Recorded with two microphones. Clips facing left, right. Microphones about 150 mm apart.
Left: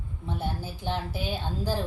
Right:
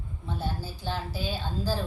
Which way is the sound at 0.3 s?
20° left (ahead or behind).